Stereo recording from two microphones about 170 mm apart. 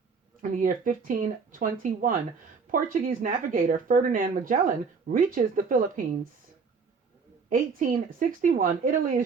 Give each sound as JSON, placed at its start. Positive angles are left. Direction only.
{"t": 0.5, "sound": "speech", "side_deg": -50}
{"t": 7.5, "sound": "speech", "side_deg": -55}